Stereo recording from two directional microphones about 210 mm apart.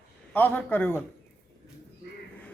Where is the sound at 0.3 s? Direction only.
10° left (ahead or behind).